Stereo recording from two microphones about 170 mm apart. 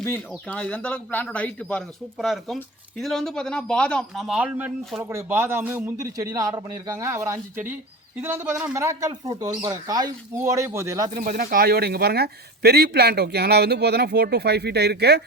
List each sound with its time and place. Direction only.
0.0 s speech: 10° left (ahead or behind); by 11.1 s 20° right (ahead or behind)
11.1 s speech: 55° right (ahead or behind); by 15.2 s 75° right (ahead or behind)